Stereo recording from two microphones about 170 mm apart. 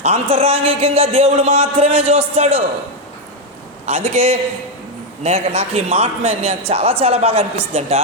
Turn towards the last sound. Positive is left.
turn(degrees=-35)  # may be behind; listen again after turning